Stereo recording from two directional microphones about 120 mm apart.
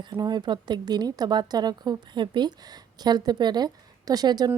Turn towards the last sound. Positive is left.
turn(degrees=-35)  # may be behind; listen again after turning